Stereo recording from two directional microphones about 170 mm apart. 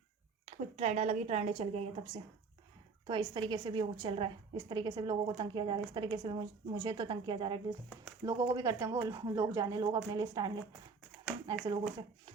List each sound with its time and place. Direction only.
0.4 s a woman's voice: 40° right (ahead or behind)
11.6 s a woman's voice: 25° right (ahead or behind)